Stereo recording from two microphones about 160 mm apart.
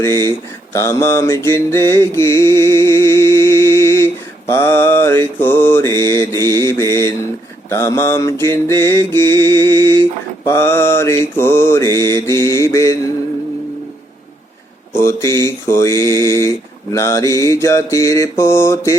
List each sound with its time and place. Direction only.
0.3 s mantra: 15° left (ahead or behind)
14.9 s speech: 15° left (ahead or behind)
15.4 s mantra: 15° left (ahead or behind)
16.0 s a sound: 25° right (ahead or behind)
16.5 s mantra: 15° left (ahead or behind)